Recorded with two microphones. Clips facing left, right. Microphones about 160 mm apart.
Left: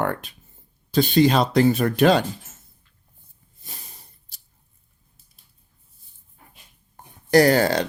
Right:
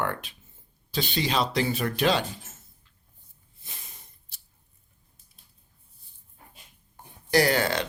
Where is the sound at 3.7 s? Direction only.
35° left (ahead or behind).